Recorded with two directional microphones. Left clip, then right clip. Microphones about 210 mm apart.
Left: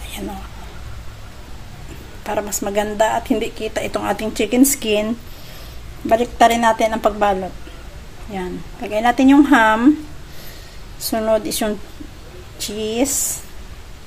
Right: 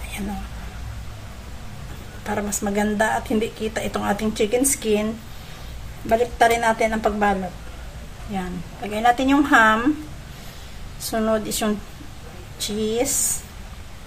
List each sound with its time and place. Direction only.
2.2 s a woman's voice: 30° left (ahead or behind)
6.0 s a woman's voice: 35° left (ahead or behind)
8.9 s a woman's voice: 25° left (ahead or behind)
11.0 s a woman's voice: 30° left (ahead or behind)